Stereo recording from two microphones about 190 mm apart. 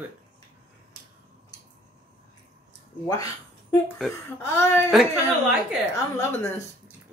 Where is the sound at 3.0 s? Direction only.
20° left (ahead or behind).